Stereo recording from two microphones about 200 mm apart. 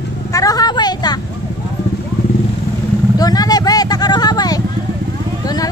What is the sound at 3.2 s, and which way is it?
Vehicle, 20° left (ahead or behind).